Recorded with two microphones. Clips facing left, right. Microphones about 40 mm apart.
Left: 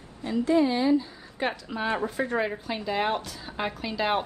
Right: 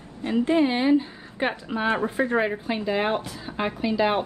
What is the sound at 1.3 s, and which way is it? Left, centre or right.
Speech, right.